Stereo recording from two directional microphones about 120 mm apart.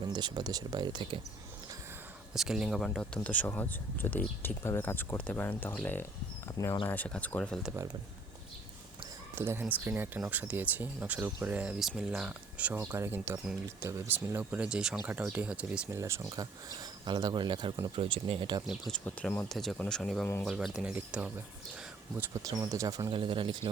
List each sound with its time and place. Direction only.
0.1 s speech: 35° right (ahead or behind)
2.3 s speech: 5° right (ahead or behind)
3.2 s speech: 15° left (ahead or behind)
9.3 s speech: 20° right (ahead or behind)
15.9 s speech: 25° right (ahead or behind); by 18.6 s 45° right (ahead or behind)
18.6 s speech: centre (ahead or behind)
22.4 s speech: 30° right (ahead or behind)
23.1 s speech: 45° right (ahead or behind)